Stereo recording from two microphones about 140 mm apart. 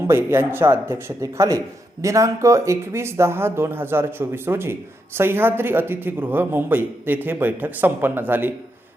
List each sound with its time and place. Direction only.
0.1 s a man's voice: 15° right (ahead or behind)